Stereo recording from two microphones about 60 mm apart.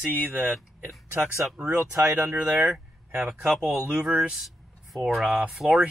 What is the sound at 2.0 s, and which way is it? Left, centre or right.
Speech, right.